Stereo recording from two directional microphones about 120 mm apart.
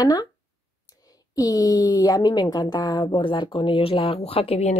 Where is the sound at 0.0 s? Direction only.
35° left (ahead or behind).